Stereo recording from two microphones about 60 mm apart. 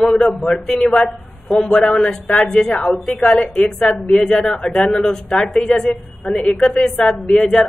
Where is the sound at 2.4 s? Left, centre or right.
Centre.